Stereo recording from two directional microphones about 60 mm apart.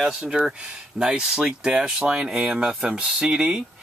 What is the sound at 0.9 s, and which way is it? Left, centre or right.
Speech, centre.